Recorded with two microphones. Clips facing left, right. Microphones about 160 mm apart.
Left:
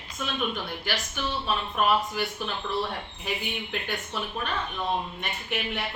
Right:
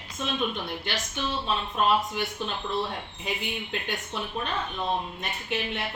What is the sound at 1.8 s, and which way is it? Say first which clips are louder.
A woman's voice: even; 25° right (ahead or behind).